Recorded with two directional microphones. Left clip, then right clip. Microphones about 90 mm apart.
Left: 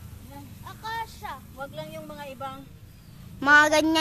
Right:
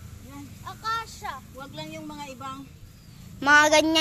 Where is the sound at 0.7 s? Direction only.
45° left (ahead or behind).